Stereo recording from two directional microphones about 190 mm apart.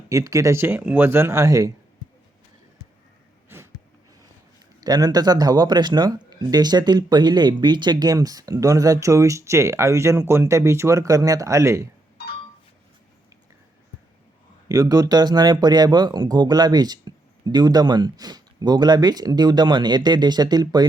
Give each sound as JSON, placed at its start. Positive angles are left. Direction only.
{"t": 0.1, "sound": "speech", "side_deg": -15}
{"t": 3.5, "sound": "a sound", "side_deg": -10}
{"t": 4.8, "sound": "speech", "side_deg": -20}
{"t": 14.7, "sound": "speech", "side_deg": -20}